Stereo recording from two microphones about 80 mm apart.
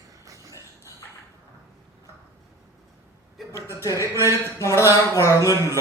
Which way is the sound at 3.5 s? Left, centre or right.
Left.